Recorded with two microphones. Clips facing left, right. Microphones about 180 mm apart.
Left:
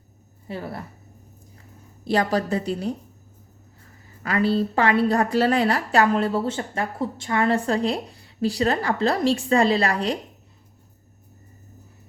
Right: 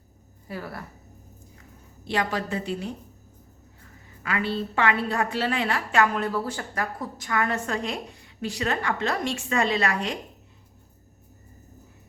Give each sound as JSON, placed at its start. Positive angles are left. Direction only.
{"t": 0.4, "sound": "speech", "side_deg": 25}
{"t": 2.0, "sound": "a woman's voice", "side_deg": 40}
{"t": 4.2, "sound": "a woman's voice", "side_deg": 35}